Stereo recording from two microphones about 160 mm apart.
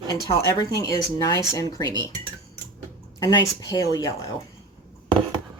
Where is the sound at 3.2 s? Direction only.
25° left (ahead or behind).